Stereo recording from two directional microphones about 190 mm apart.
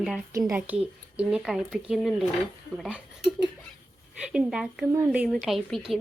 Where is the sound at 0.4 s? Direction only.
5° right (ahead or behind).